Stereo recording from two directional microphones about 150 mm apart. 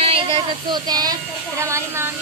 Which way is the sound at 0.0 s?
35° right (ahead or behind).